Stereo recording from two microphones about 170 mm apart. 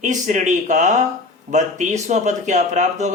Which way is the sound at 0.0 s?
45° right (ahead or behind).